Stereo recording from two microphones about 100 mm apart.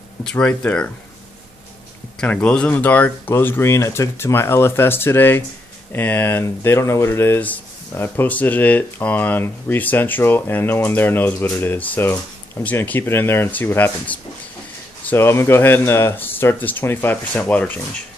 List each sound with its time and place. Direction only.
0.2 s speech: 10° left (ahead or behind)
2.1 s speech: 10° left (ahead or behind)